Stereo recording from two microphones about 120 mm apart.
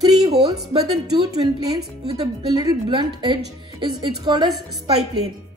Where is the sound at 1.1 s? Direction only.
35° right (ahead or behind).